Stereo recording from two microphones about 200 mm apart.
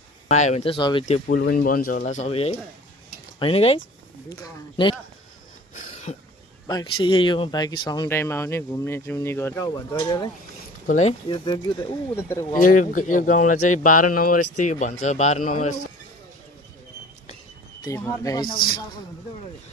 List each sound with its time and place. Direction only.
0.3 s speech: 35° left (ahead or behind)
0.7 s speech: 20° left (ahead or behind)
1.0 s speech: 40° left (ahead or behind); by 4.9 s 25° left (ahead or behind)
5.8 s a sound: 35° left (ahead or behind)
6.7 s speech: 20° left (ahead or behind)
10.9 s speech: 35° left (ahead or behind)
11.4 s speech: 20° left (ahead or behind)
12.5 s speech: 40° left (ahead or behind)
17.8 s speech: 15° left (ahead or behind)